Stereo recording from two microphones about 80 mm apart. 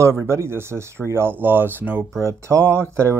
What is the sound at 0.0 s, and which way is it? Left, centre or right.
Speech, right.